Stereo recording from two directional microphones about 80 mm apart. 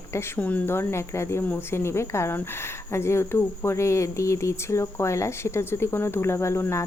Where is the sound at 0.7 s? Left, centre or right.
Left.